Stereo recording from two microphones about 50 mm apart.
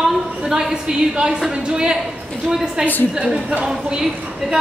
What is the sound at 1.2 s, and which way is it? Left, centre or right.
Speech, centre.